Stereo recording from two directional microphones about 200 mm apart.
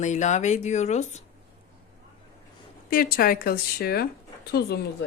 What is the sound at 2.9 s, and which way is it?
Speech, 45° left (ahead or behind).